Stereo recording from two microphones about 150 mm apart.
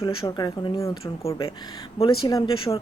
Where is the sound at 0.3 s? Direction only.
25° left (ahead or behind).